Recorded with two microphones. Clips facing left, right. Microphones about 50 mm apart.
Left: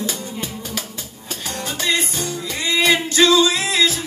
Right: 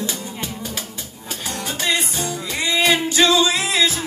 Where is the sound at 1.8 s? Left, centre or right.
Centre.